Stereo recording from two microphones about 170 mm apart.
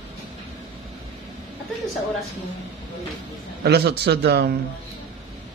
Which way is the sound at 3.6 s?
70° right (ahead or behind).